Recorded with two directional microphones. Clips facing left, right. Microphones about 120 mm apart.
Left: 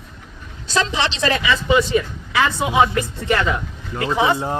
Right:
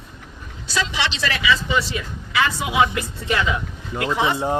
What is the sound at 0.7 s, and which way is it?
Speech, 45° left (ahead or behind).